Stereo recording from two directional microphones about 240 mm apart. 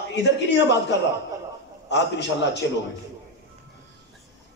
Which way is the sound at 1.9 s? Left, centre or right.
Left.